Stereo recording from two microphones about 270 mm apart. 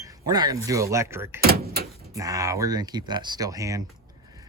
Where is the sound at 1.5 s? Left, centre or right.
Right.